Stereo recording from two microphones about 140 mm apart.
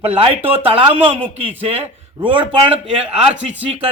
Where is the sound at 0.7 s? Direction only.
40° right (ahead or behind).